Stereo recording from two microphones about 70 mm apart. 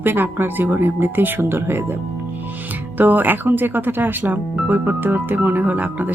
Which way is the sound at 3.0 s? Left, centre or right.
Right.